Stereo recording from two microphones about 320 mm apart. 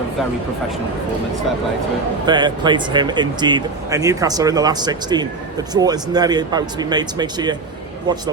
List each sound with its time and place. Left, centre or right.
2.2 s speech: centre